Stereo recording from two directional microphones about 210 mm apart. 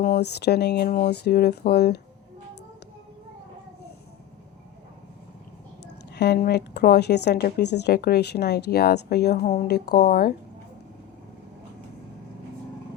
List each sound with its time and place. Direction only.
0.0 s speech: 50° left (ahead or behind)
0.9 s speech: 35° left (ahead or behind)
1.1 s speech: 50° left (ahead or behind)
6.1 s speech: 50° left (ahead or behind)